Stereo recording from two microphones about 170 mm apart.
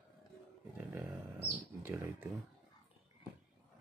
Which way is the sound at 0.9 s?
15° right (ahead or behind).